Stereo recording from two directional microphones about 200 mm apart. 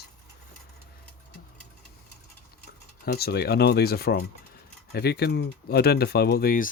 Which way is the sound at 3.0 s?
50° left (ahead or behind).